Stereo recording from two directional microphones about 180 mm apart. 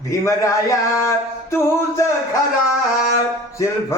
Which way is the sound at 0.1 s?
15° left (ahead or behind).